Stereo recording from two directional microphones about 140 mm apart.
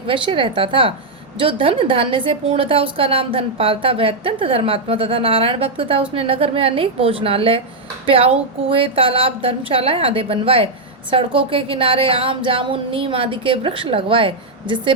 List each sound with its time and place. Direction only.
0.1 s a woman's voice: 40° right (ahead or behind)